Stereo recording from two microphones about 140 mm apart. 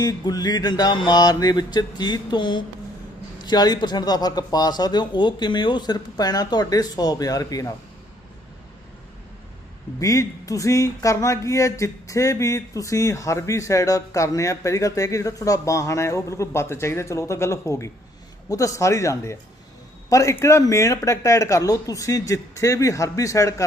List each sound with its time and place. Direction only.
0.0 s speech: 30° left (ahead or behind)
10.0 s speech: 25° left (ahead or behind)